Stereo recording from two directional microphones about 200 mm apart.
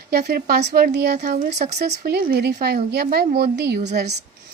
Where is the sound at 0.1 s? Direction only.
50° right (ahead or behind).